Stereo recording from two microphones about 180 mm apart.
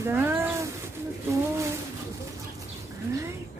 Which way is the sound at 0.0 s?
10° right (ahead or behind).